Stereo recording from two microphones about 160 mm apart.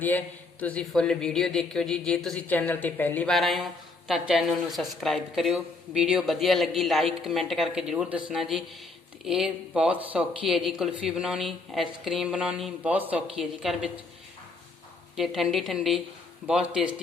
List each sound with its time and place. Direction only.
0.6 s speech: 10° left (ahead or behind)
15.1 s speech: centre (ahead or behind)